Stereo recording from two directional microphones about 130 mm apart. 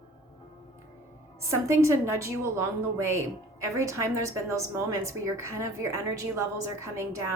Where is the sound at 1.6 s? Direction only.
20° right (ahead or behind).